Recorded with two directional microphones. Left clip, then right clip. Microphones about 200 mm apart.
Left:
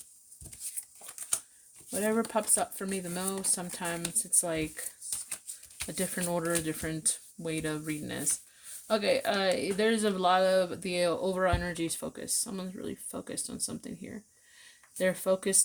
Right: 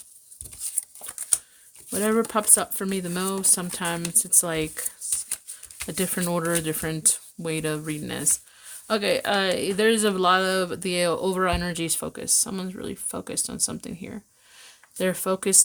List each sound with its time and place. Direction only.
1.9 s speech: 40° right (ahead or behind)